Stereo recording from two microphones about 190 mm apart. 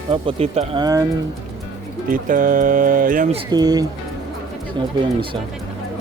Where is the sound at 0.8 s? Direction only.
20° right (ahead or behind).